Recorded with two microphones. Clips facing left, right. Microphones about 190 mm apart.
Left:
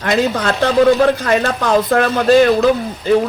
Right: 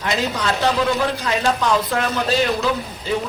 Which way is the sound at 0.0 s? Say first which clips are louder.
Left 6 dB; 55° left (ahead or behind).